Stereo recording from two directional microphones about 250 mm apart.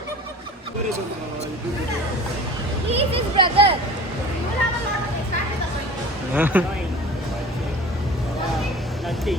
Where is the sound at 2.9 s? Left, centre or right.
Right.